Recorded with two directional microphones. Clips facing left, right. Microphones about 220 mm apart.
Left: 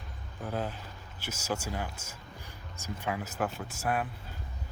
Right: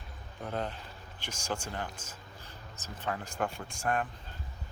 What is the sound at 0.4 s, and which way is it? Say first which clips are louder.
Speech: left 1 dB; 5° left (ahead or behind).